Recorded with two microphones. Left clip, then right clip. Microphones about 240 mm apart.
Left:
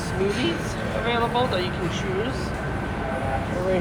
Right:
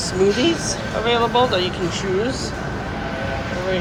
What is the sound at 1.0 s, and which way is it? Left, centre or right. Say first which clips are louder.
Speech: right 6 dB; centre.